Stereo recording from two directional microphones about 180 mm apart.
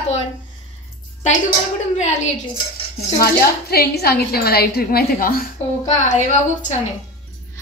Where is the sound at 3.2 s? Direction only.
60° left (ahead or behind).